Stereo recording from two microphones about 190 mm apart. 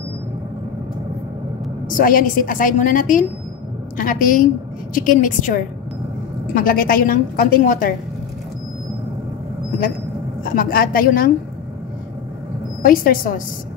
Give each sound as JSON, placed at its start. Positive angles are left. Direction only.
{"t": 1.9, "sound": "a woman's voice", "side_deg": 45}
{"t": 6.5, "sound": "a woman's voice", "side_deg": 50}
{"t": 10.4, "sound": "a woman's voice", "side_deg": 50}
{"t": 12.8, "sound": "a woman's voice", "side_deg": 50}